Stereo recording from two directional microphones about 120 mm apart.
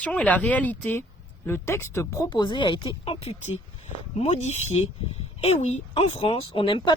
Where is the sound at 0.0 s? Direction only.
10° left (ahead or behind).